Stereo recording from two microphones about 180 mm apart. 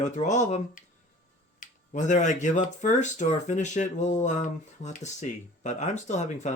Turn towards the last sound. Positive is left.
turn(degrees=40)  # may be behind; listen again after turning